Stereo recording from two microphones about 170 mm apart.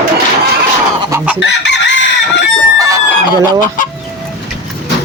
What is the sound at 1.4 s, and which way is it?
Chicken, 90° left.